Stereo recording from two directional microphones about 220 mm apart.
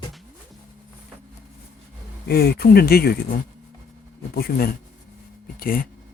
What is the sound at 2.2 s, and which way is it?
Speech, 45° left (ahead or behind).